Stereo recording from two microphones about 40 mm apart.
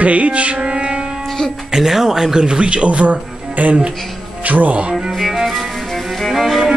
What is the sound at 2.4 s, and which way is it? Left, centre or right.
Speech, right.